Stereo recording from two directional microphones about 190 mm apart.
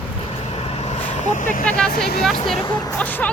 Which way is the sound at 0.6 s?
35° left (ahead or behind).